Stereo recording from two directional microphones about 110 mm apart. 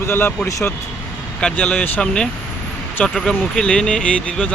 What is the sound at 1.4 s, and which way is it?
Speech, 15° left (ahead or behind).